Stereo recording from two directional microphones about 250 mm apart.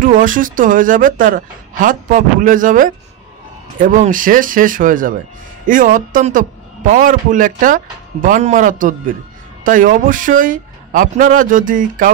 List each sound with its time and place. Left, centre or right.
0.0 s a man's voice: right